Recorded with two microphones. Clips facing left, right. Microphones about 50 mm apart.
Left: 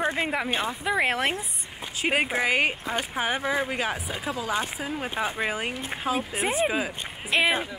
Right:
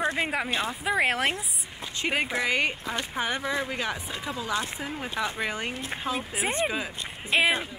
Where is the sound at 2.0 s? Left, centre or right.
Left.